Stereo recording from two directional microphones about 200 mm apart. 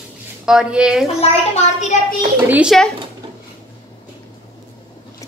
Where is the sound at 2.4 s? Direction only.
5° right (ahead or behind).